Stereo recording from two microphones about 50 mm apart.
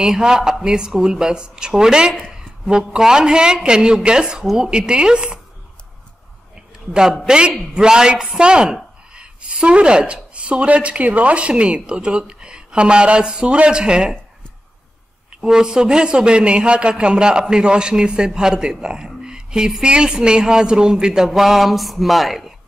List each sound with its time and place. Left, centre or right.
0.0 s a man's voice: centre
6.9 s a man's voice: centre
15.4 s a man's voice: centre